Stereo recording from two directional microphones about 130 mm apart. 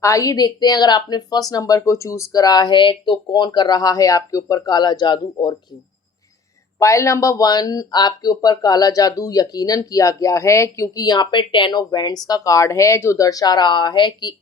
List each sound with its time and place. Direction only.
0.0 s speech: 25° left (ahead or behind)
6.7 s speech: 25° left (ahead or behind)